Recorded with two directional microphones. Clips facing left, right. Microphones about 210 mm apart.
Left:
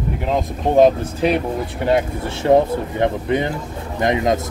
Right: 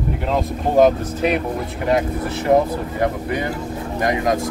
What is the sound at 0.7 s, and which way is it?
Speech, 30° left (ahead or behind).